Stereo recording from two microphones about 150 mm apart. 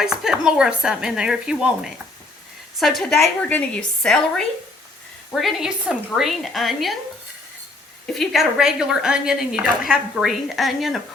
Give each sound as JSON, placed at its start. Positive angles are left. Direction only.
{"t": 0.0, "sound": "a woman's voice", "side_deg": -5}
{"t": 8.0, "sound": "a woman's voice", "side_deg": 0}